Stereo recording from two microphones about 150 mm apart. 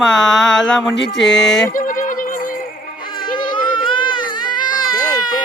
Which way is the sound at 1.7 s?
65° left (ahead or behind).